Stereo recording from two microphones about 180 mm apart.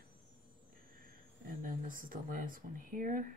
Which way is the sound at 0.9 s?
50° right (ahead or behind).